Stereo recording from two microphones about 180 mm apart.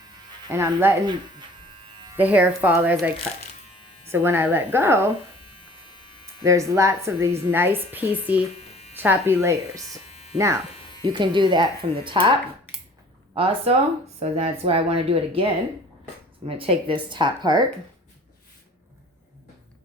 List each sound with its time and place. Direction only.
0.4 s a woman's voice: 15° right (ahead or behind)
1.7 s electric shaver: 30° right (ahead or behind)
2.1 s a woman's voice: 10° right (ahead or behind)
5.4 s electric shaver: 25° left (ahead or behind)
6.4 s a woman's voice: 15° right (ahead or behind)
8.5 s electric shaver: 35° left (ahead or behind)
9.0 s a woman's voice: 10° right (ahead or behind)
10.1 s electric shaver: 35° left (ahead or behind)
10.3 s a woman's voice: 15° right (ahead or behind)
13.3 s a woman's voice: 30° right (ahead or behind)
16.5 s speech: 30° right (ahead or behind)